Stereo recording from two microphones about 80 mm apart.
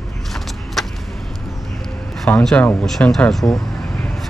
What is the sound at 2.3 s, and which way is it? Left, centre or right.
Speech, left.